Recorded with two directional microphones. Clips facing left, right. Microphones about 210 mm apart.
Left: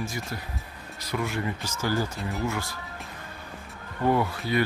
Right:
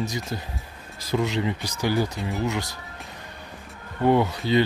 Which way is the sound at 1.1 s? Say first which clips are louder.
Right 5 dB; 20° right (ahead or behind).